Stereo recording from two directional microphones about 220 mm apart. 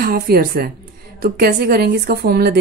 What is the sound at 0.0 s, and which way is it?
A woman's voice, 40° right (ahead or behind).